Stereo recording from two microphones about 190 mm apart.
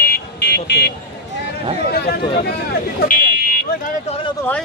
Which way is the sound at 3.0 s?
45° left (ahead or behind).